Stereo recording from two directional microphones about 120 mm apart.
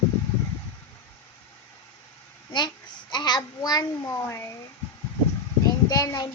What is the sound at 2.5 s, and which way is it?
A child's voice, 40° left (ahead or behind).